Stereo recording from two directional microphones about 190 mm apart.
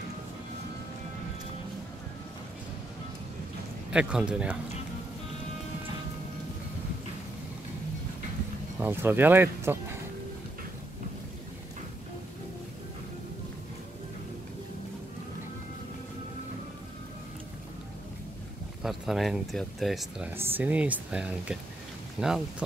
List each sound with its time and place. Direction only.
3.9 s speech: 5° right (ahead or behind)
8.7 s speech: 10° right (ahead or behind)
18.8 s speech: centre (ahead or behind)